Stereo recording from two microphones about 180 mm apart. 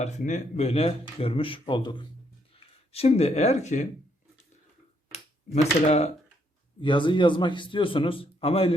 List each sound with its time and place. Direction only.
0.0 s a man's voice: 40° left (ahead or behind)
5.5 s speech: 40° left (ahead or behind)
6.8 s a man's voice: 25° left (ahead or behind)